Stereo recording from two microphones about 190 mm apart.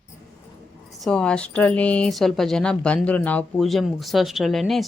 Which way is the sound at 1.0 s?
5° left (ahead or behind).